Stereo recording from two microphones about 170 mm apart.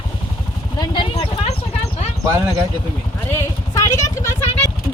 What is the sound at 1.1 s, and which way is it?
Speech, 40° left (ahead or behind).